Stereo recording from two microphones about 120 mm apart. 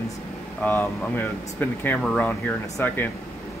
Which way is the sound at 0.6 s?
15° left (ahead or behind).